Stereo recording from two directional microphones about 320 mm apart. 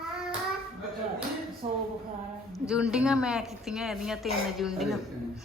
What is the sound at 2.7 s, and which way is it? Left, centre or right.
Speech, centre.